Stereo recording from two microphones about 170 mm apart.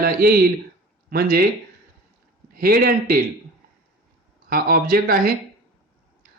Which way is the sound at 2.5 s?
60° right (ahead or behind).